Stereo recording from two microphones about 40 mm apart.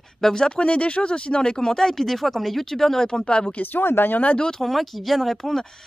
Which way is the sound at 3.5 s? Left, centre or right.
Left.